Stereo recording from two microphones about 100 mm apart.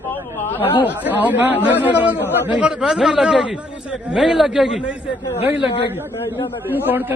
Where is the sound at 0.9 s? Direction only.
15° right (ahead or behind).